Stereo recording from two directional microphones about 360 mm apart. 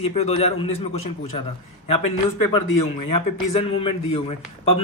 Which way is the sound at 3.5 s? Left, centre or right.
Centre.